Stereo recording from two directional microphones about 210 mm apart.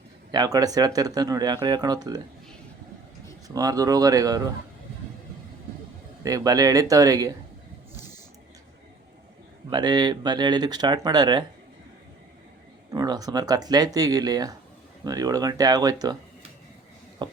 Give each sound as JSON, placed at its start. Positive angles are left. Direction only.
{"t": 0.3, "sound": "speech", "side_deg": -20}
{"t": 3.5, "sound": "speech", "side_deg": -15}
{"t": 6.2, "sound": "speech", "side_deg": -15}
{"t": 9.6, "sound": "speech", "side_deg": -20}
{"t": 12.9, "sound": "speech", "side_deg": -15}
{"t": 17.2, "sound": "a sound", "side_deg": -20}